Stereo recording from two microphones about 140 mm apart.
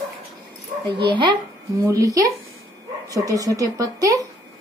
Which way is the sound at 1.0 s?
35° right (ahead or behind).